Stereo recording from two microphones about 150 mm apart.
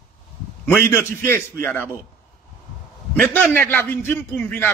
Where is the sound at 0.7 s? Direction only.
15° left (ahead or behind).